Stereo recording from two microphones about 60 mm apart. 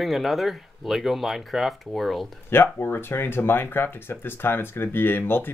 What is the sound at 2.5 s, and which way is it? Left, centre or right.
Speech, left.